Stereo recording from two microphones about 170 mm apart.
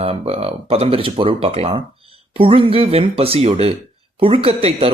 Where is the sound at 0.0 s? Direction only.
35° right (ahead or behind).